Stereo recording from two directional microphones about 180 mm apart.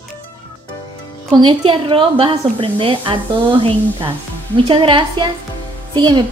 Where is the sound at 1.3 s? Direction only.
25° right (ahead or behind).